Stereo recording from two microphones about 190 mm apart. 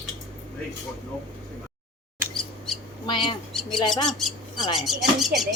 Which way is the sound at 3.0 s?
25° left (ahead or behind).